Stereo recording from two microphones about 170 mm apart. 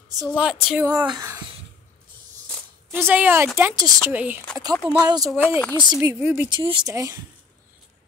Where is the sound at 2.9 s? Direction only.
10° right (ahead or behind).